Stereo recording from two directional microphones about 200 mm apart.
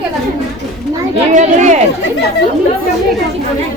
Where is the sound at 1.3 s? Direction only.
35° right (ahead or behind).